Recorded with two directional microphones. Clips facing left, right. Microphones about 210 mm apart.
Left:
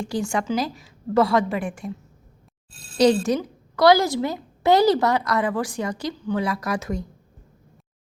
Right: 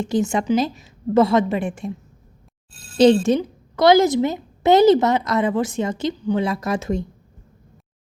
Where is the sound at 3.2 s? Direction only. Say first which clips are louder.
Right 4 dB; 25° right (ahead or behind).